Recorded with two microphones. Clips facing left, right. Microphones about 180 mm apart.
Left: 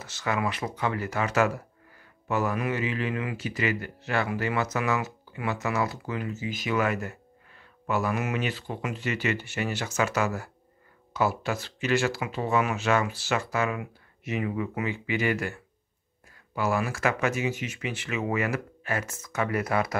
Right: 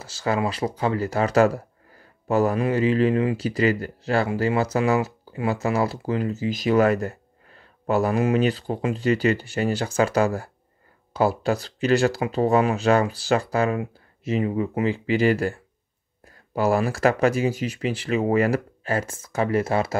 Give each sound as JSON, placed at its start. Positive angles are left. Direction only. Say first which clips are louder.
{"t": 0.0, "sound": "speech", "louder": "right 5 dB", "side_deg": -30}